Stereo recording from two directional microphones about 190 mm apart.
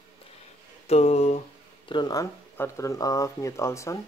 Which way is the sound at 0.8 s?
35° left (ahead or behind).